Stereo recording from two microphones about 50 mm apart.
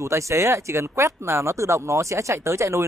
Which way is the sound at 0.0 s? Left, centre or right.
Right.